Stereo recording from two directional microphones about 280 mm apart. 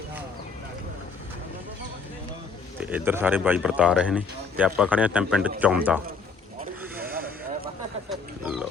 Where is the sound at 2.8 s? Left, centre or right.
Centre.